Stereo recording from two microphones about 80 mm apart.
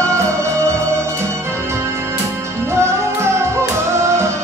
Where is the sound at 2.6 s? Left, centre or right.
Right.